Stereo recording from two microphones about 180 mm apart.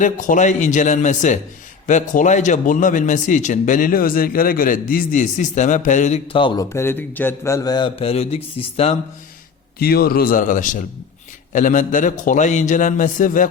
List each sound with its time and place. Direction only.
0.0 s speech: 45° left (ahead or behind); by 6.7 s 25° left (ahead or behind)
6.7 s a man's voice: 10° left (ahead or behind); by 9.0 s 35° left (ahead or behind)
9.7 s speech: 55° left (ahead or behind)